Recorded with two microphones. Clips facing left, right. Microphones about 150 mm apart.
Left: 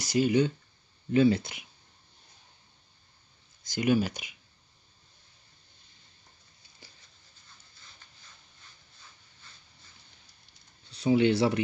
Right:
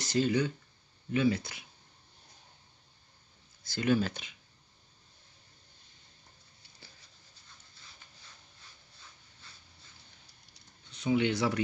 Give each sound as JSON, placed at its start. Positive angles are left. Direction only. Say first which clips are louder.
{"t": 0.0, "sound": "speech", "louder": "left 3 dB", "side_deg": 10}
{"t": 1.1, "sound": "speech", "louder": "left 6 dB", "side_deg": 30}
{"t": 3.6, "sound": "speech", "louder": "left 3 dB", "side_deg": 15}
{"t": 10.9, "sound": "speech", "louder": "left 5 dB", "side_deg": 35}